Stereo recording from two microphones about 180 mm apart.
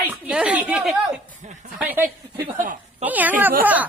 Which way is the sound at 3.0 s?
10° right (ahead or behind).